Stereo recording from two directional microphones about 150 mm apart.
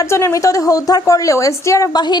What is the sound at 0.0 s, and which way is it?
A woman's voice, 20° left (ahead or behind).